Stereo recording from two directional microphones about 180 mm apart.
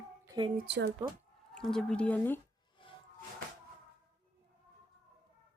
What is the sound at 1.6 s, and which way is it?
Speech, 5° left (ahead or behind).